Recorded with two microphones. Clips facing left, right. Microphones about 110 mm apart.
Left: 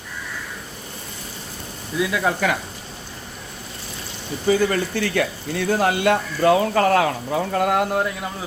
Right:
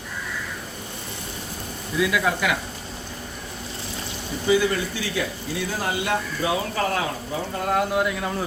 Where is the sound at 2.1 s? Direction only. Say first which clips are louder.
Left 4 dB; 35° left (ahead or behind).